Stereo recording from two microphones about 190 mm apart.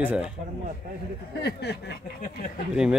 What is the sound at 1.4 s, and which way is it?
Speech, 60° left (ahead or behind).